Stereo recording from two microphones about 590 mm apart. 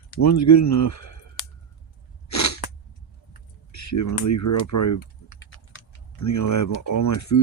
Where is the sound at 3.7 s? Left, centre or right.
Left.